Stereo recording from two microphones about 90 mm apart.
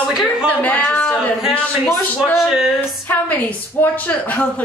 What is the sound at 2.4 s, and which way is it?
Speech, 5° right (ahead or behind).